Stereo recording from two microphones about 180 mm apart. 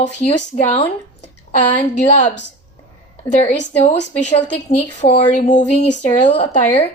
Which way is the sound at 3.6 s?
40° left (ahead or behind).